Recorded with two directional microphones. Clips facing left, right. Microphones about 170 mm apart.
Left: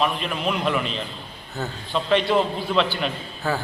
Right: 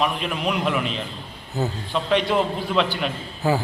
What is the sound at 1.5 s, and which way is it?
Speech, 15° right (ahead or behind).